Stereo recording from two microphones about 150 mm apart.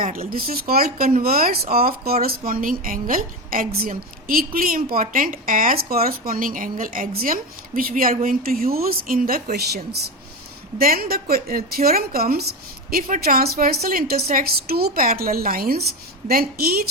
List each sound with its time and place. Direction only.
0.0 s a woman's voice: 70° right (ahead or behind)
2.2 s a woman's voice: 70° right (ahead or behind); by 10.0 s 90° right
10.8 s a woman's voice: 80° right